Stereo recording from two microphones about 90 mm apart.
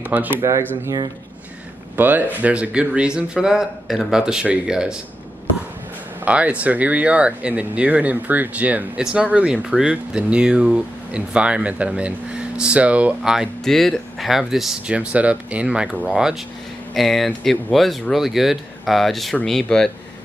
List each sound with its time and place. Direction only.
0.0 s speech: 20° right (ahead or behind)
0.4 s speech: 35° right (ahead or behind)
2.0 s speech: 20° right (ahead or behind)
6.2 s speech: 15° right (ahead or behind)
13.7 s speech: 5° left (ahead or behind)